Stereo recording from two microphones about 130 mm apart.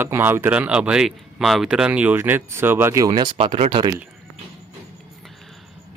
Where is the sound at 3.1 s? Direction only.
35° right (ahead or behind).